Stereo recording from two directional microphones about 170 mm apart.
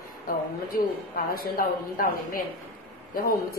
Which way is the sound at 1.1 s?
60° left (ahead or behind).